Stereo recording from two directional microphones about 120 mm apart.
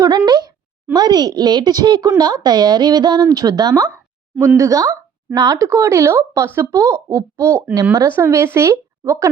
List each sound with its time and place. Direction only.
0.3 s a woman's voice: 35° right (ahead or behind)